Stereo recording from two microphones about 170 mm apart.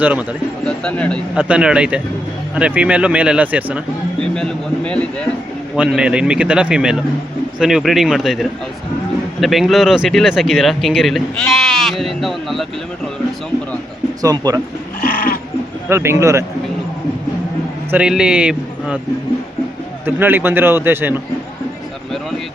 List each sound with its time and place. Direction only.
0.0 s speech: 10° right (ahead or behind)
0.6 s speech: 5° left (ahead or behind)
1.4 s speech: 5° right (ahead or behind)
4.2 s speech: 5° left (ahead or behind)
5.7 s speech: 5° right (ahead or behind)
14.2 s speech: 20° right (ahead or behind)
15.0 s goat: 55° left (ahead or behind)
15.9 s speech: 15° right (ahead or behind)
17.9 s speech: 5° right (ahead or behind)
20.1 s speech: 10° right (ahead or behind)